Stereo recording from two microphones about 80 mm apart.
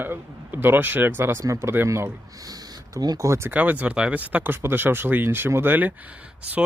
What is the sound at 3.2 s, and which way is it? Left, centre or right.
Speech, right.